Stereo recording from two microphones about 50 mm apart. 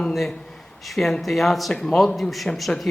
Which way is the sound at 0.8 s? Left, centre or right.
Centre.